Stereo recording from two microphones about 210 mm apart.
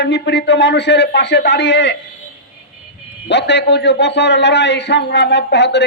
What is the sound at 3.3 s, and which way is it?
A man's voice, 55° left (ahead or behind).